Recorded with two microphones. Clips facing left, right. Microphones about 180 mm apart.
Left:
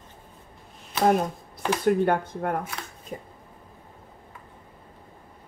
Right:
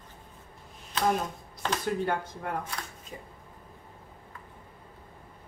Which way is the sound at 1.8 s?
55° left (ahead or behind).